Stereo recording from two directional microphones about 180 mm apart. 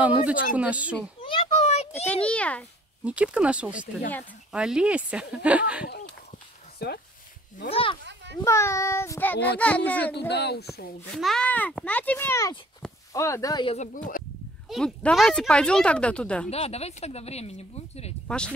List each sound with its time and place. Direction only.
0.0 s speech: 10° right (ahead or behind)
1.2 s a sound: 30° left (ahead or behind)
2.2 s a child's voice: 5° left (ahead or behind)
3.0 s speech: 5° right (ahead or behind)
6.8 s speech: 60° left (ahead or behind)
7.7 s speech: 30° left (ahead or behind)
8.0 s children playing: 75° right (ahead or behind)
8.4 s a child's voice: 15° left (ahead or behind)
10.1 s speech: 65° left (ahead or behind)
11.1 s a child's voice: centre (ahead or behind); by 13.7 s 20° left (ahead or behind)
13.7 s speech: 45° left (ahead or behind)
14.7 s speech: centre (ahead or behind)
16.4 s speech: 35° left (ahead or behind)